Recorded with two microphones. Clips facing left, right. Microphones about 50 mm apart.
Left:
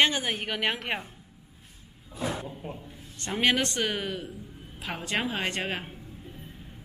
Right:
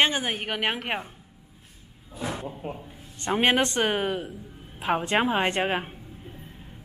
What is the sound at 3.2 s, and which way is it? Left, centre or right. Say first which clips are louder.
Speech: right 3 dB; right.